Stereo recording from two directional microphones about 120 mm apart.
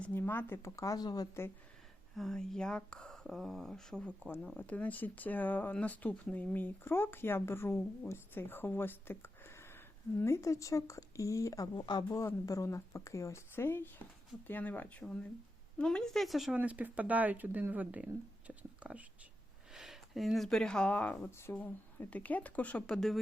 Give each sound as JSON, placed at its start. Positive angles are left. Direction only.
{"t": 0.0, "sound": "speech", "side_deg": 15}
{"t": 2.1, "sound": "speech", "side_deg": 5}
{"t": 12.2, "sound": "speech", "side_deg": 25}
{"t": 16.6, "sound": "speech", "side_deg": -15}
{"t": 21.2, "sound": "speech", "side_deg": 20}